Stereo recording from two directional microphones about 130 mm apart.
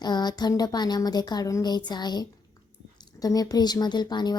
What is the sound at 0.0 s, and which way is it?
A woman's voice, 30° left (ahead or behind).